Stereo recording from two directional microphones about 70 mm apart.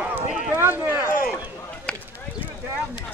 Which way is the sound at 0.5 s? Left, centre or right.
Right.